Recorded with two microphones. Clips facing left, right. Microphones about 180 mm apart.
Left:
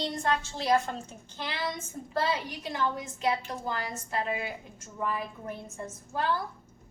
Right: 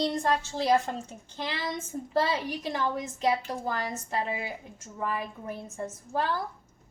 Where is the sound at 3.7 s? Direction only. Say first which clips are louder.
Right 2 dB; 30° right (ahead or behind).